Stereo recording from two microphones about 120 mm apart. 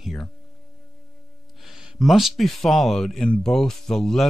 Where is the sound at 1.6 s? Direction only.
5° right (ahead or behind).